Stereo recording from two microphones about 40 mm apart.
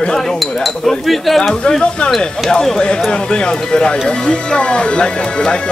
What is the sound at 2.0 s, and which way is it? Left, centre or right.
Speech, left.